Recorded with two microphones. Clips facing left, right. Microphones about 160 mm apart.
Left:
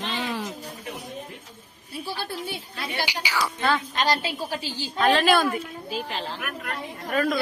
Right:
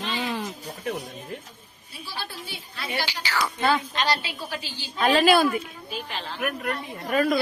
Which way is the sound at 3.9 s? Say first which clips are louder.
Left 2 dB; 45° left (ahead or behind).